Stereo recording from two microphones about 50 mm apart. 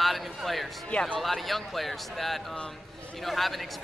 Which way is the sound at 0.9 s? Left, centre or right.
Left.